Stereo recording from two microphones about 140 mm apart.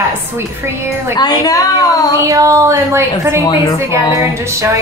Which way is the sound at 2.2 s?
20° right (ahead or behind).